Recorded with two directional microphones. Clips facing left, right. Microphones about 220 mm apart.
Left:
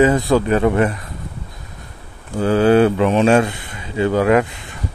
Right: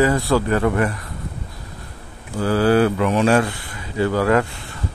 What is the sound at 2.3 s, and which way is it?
Speech, 20° left (ahead or behind).